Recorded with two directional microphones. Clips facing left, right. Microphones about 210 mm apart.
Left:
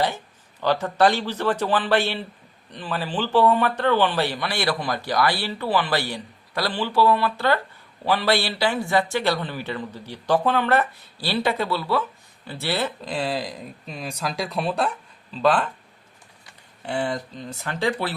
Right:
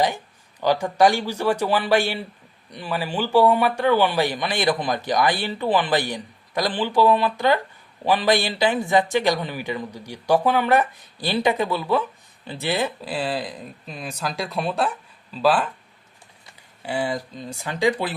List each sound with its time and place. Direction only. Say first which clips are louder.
0.6 s speech: right 2 dB; 10° right (ahead or behind)
16.8 s speech: right 1 dB; 10° right (ahead or behind)